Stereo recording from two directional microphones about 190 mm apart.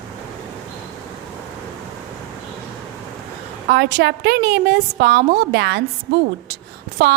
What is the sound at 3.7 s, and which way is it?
A woman's voice, 55° right (ahead or behind).